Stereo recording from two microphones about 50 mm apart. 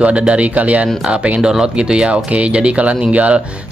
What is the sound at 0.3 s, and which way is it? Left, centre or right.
Speech, right.